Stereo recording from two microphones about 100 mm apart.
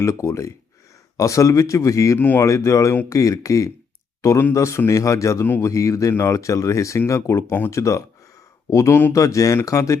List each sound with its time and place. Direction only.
0.0 s speech: 30° left (ahead or behind)
2.1 s speech: 20° left (ahead or behind)
2.4 s speech: 30° left (ahead or behind)